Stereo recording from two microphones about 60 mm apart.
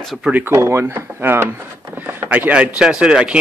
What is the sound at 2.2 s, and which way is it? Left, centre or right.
Speech, right.